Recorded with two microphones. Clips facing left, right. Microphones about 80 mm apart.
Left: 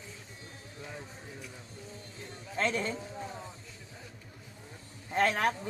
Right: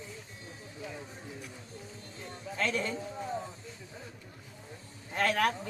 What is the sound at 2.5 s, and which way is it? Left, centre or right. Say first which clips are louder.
Speech: left 1 dB; left.